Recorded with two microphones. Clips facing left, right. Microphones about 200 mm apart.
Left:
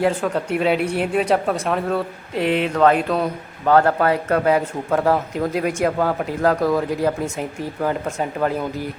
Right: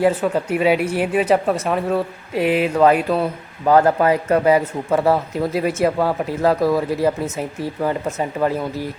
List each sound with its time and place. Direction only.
0.0 s speech: 5° right (ahead or behind)